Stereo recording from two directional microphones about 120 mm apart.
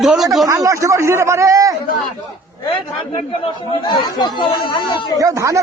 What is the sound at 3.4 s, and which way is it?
Speech, 40° left (ahead or behind).